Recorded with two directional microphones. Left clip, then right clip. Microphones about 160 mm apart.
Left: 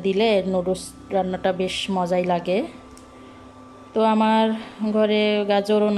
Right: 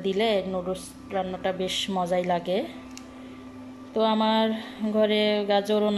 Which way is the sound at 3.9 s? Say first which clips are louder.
Left 4 dB; 10° left (ahead or behind).